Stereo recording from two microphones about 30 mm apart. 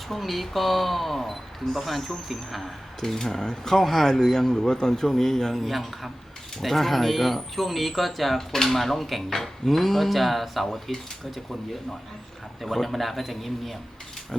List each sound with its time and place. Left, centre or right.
0.1 s speech: centre
3.0 s speech: centre
3.4 s speech: left
3.8 s speech: centre
4.0 s speech: centre
5.6 s speech: centre
8.4 s speech: centre
12.7 s speech: centre